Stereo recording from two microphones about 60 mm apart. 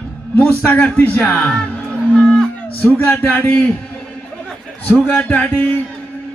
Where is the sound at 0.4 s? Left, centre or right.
Left.